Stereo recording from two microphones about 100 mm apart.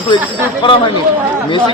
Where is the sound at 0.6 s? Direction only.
60° left (ahead or behind).